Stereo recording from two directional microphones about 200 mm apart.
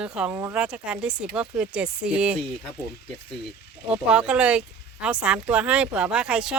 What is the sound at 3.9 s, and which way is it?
Speech, 5° right (ahead or behind).